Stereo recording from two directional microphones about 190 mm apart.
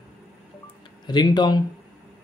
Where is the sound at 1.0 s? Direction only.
20° left (ahead or behind).